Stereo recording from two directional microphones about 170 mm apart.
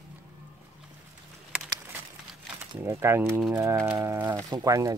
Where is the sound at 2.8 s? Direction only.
15° right (ahead or behind).